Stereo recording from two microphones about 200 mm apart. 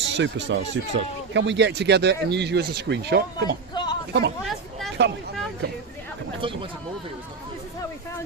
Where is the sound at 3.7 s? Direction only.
20° left (ahead or behind).